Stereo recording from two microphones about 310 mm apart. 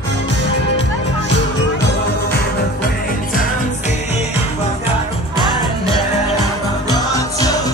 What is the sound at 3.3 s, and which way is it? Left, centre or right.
Music, left.